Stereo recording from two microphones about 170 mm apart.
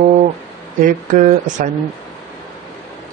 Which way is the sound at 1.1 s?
45° right (ahead or behind).